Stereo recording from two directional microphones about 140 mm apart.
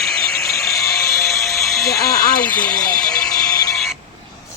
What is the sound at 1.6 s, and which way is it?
Music, centre (ahead or behind).